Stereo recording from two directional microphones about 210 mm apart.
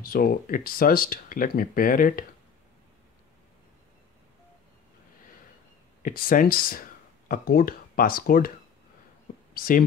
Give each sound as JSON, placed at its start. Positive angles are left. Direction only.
{"t": 0.0, "sound": "speech", "side_deg": 45}
{"t": 6.0, "sound": "speech", "side_deg": 40}